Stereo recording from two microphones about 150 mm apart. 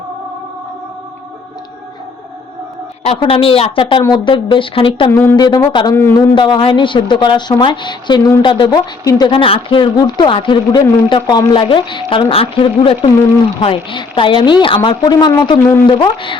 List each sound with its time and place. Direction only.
3.2 s speech: 35° left (ahead or behind)
5.1 s a man's voice: 15° left (ahead or behind)
5.4 s speech: 30° left (ahead or behind)
5.9 s a man's voice: 15° left (ahead or behind)
6.3 s speech: 30° left (ahead or behind)